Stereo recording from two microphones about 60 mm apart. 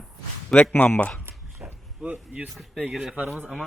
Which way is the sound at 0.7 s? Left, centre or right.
Left.